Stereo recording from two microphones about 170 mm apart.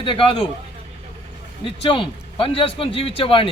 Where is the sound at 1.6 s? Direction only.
30° left (ahead or behind).